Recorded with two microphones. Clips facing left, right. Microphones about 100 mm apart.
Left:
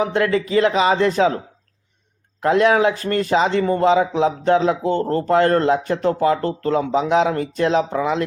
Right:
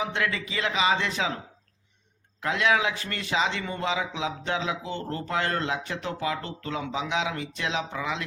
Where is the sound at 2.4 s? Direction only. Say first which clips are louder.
Left 10 dB; 45° left (ahead or behind).